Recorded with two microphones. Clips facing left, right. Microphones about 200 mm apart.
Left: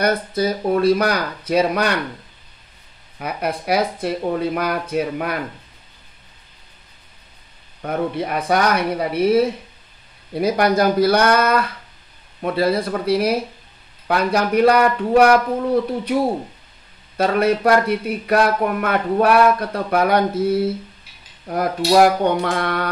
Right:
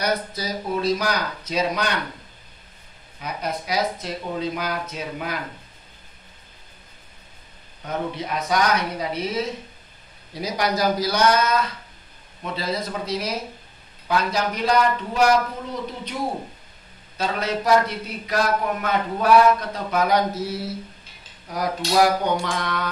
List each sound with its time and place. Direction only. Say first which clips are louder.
0.0 s speech: left 6 dB; 55° left (ahead or behind)
3.2 s speech: left 5 dB; 60° left (ahead or behind)
7.8 s speech: left 6 dB; 60° left (ahead or behind)
17.2 s speech: left 8 dB; 60° left (ahead or behind)